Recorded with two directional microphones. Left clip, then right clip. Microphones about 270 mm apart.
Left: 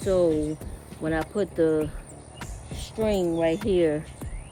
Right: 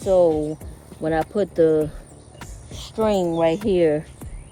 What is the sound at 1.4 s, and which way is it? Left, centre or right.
Speech, right.